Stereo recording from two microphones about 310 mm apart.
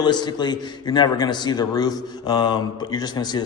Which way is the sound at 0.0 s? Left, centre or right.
Centre.